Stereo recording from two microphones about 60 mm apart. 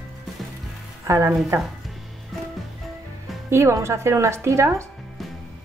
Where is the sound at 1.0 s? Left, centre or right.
Right.